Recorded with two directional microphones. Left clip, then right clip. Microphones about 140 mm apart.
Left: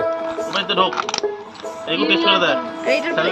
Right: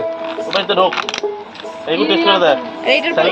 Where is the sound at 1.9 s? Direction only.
30° left (ahead or behind).